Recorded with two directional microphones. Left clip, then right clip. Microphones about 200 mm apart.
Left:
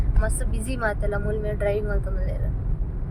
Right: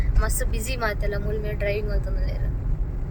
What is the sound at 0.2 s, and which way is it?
Speech, 20° left (ahead or behind).